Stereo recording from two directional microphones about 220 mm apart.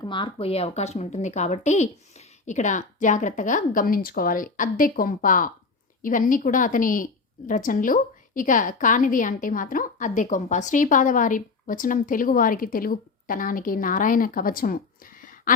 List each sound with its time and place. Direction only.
0.0 s a woman's voice: 20° left (ahead or behind); by 15.5 s 40° left (ahead or behind)